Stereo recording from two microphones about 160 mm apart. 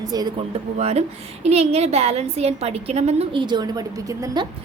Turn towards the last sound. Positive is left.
turn(degrees=-25)  # may be behind; listen again after turning